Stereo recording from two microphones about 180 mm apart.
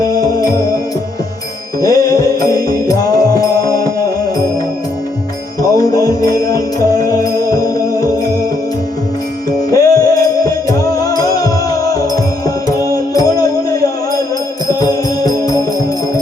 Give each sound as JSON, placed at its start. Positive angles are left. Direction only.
{"t": 0.0, "sound": "music", "side_deg": 20}
{"t": 1.8, "sound": "music", "side_deg": 20}
{"t": 5.7, "sound": "music", "side_deg": 20}
{"t": 9.7, "sound": "music", "side_deg": 20}